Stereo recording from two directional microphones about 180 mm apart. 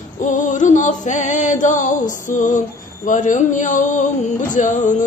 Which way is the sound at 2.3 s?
45° left (ahead or behind).